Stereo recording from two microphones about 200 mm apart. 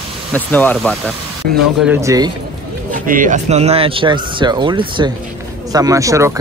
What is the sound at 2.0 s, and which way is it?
Speech, 15° right (ahead or behind).